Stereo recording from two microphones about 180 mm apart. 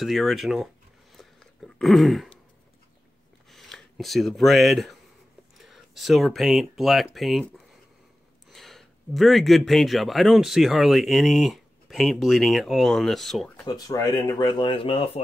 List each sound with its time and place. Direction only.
0.0 s speech: centre (ahead or behind)
1.1 s throat clearing: centre (ahead or behind)
3.4 s speech: centre (ahead or behind)
13.7 s speech: 20° left (ahead or behind)